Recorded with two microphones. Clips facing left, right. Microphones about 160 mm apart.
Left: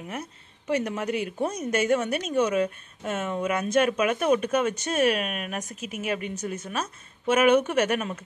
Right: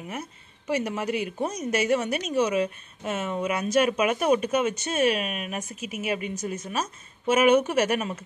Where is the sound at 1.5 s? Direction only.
50° left (ahead or behind).